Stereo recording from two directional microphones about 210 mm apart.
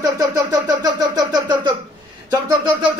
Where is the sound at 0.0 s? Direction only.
15° right (ahead or behind).